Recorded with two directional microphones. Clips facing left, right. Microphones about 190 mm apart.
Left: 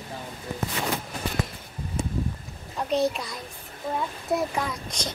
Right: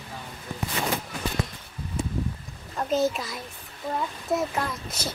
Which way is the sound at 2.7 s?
Centre (ahead or behind).